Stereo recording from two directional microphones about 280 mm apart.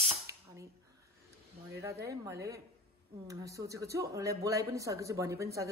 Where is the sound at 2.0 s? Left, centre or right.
Centre.